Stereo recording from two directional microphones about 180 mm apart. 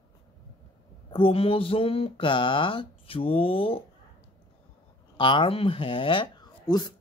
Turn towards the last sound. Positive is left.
turn(degrees=25)  # may be behind; listen again after turning